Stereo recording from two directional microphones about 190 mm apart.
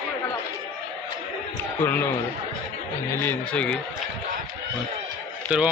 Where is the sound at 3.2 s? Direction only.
5° left (ahead or behind).